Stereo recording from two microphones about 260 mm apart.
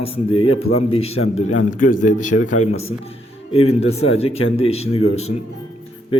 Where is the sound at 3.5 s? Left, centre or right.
Left.